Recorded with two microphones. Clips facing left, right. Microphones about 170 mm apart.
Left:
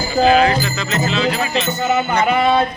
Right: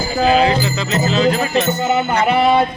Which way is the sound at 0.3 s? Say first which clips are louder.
Even; 30° right (ahead or behind).